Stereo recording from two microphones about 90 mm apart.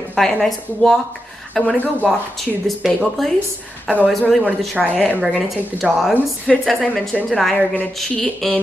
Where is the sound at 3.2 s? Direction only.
Centre (ahead or behind).